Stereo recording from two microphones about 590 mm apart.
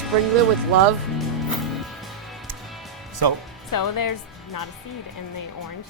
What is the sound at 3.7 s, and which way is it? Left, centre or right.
Speech, left.